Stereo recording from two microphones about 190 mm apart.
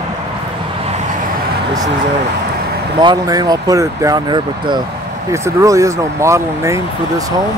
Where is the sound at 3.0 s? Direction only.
20° right (ahead or behind).